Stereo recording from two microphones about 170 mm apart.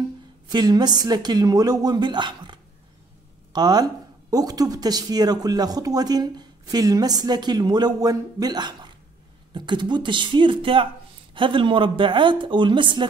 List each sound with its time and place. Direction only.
0.5 s speech: 25° right (ahead or behind)